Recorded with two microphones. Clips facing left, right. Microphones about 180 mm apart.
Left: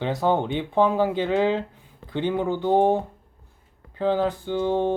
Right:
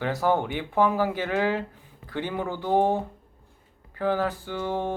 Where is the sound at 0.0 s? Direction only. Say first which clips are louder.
Left 2 dB; 20° left (ahead or behind).